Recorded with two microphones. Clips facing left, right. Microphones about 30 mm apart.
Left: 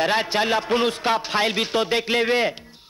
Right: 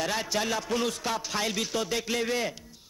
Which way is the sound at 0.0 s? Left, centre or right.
Left.